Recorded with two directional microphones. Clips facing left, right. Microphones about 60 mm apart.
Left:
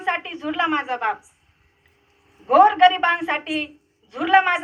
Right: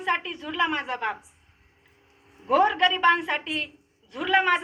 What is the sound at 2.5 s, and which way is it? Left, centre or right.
A woman's voice, left.